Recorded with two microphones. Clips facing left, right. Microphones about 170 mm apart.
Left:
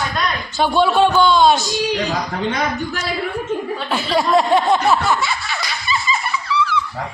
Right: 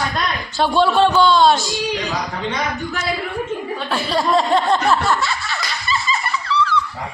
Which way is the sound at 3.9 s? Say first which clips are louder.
Left 2 dB; 5° left (ahead or behind).